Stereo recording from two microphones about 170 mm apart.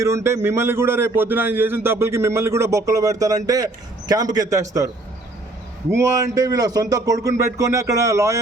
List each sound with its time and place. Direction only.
0.0 s a man's voice: 15° right (ahead or behind)
5.9 s speech: 20° right (ahead or behind)